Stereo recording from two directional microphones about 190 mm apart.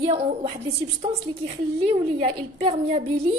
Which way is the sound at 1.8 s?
35° right (ahead or behind).